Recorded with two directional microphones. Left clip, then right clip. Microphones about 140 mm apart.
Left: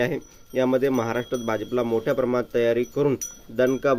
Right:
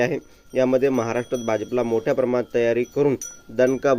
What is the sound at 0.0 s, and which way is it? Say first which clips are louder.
Speech: right 3 dB; 25° right (ahead or behind).